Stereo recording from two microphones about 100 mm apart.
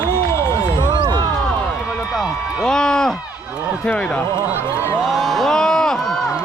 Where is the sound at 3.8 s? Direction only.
10° left (ahead or behind).